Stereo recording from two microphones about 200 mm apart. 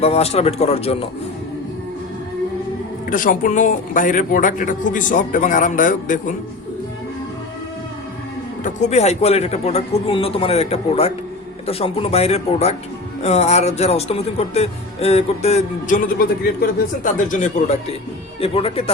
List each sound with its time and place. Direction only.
0.0 s speech: 30° left (ahead or behind)
3.1 s speech: 40° left (ahead or behind)
8.6 s speech: 35° left (ahead or behind)
18.3 s speech: 30° left (ahead or behind)